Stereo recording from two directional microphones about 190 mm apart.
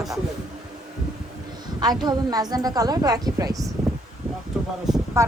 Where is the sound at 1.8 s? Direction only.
20° right (ahead or behind).